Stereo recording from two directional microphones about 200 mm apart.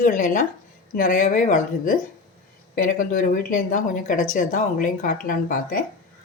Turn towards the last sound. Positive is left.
turn(degrees=45)  # may be behind; listen again after turning